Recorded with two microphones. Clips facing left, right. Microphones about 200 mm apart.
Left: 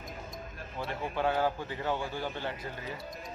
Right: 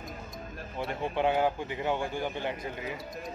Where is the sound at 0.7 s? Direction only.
20° right (ahead or behind).